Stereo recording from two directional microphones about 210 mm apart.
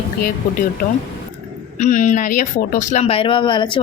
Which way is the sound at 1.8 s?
35° left (ahead or behind).